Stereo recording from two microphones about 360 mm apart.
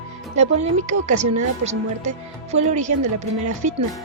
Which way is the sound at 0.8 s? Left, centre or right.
Centre.